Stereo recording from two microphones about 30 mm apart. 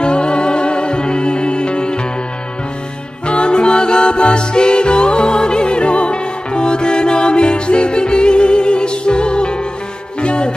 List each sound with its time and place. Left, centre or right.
0.0 s music: left
3.3 s music: left